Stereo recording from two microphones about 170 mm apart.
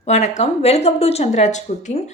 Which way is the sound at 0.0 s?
40° left (ahead or behind).